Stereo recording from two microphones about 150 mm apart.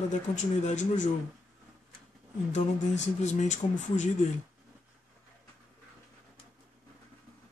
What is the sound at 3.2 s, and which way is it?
Speech, 50° left (ahead or behind).